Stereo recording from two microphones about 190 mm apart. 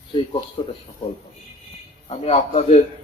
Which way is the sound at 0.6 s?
30° left (ahead or behind).